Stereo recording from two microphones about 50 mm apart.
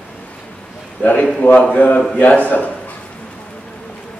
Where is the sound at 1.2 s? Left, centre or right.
Centre.